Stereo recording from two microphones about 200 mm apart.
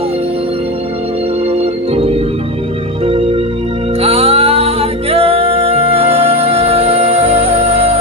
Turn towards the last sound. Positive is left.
turn(degrees=-30)  # may be behind; listen again after turning